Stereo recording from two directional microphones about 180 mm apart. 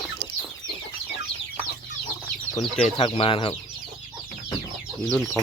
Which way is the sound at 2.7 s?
30° left (ahead or behind).